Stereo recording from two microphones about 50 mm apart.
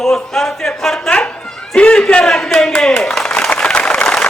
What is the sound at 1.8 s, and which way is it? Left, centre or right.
Speech, centre.